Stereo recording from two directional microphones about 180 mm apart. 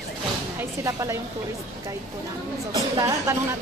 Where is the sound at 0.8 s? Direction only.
15° right (ahead or behind).